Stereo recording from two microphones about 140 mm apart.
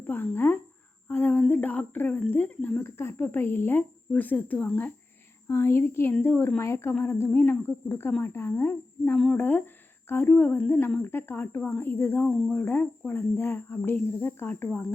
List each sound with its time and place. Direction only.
0.1 s a woman's voice: 15° left (ahead or behind)